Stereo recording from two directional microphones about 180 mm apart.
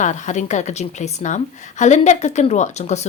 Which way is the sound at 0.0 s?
40° left (ahead or behind).